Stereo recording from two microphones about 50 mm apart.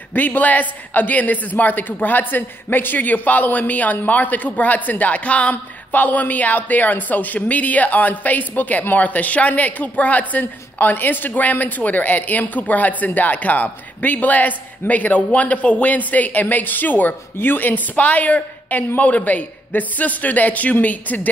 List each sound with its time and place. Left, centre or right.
0.1 s speech: left